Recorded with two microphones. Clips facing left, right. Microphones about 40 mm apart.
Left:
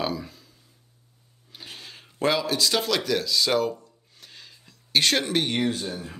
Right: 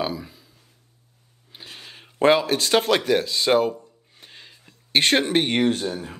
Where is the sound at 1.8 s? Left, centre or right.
Right.